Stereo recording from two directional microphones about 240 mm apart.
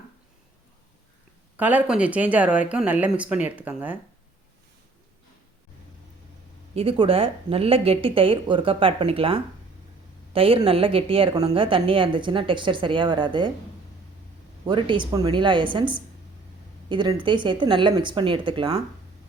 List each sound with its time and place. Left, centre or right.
1.5 s speech: centre
6.7 s a woman's voice: right
14.7 s a woman's voice: centre